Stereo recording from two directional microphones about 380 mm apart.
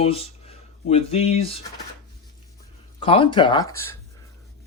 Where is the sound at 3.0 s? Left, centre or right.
Centre.